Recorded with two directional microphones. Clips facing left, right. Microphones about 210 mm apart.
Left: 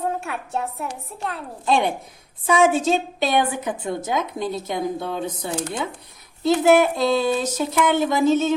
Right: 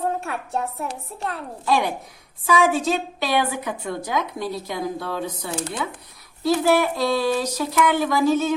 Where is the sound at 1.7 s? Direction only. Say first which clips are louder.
Left 1 dB; 25° left (ahead or behind).